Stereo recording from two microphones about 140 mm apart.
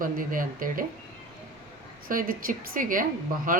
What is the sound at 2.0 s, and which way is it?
Speech, 90° right.